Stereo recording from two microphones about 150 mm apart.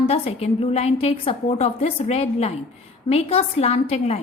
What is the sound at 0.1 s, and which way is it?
A woman's voice, 40° left (ahead or behind).